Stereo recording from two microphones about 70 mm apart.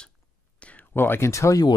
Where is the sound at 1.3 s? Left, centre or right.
Left.